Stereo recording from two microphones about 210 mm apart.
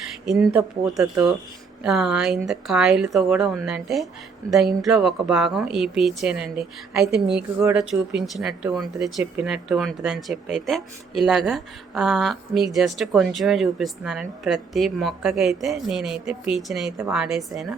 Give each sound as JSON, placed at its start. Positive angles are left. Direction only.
{"t": 0.3, "sound": "speech", "side_deg": 0}
{"t": 1.0, "sound": "speech", "side_deg": -15}
{"t": 1.8, "sound": "speech", "side_deg": 0}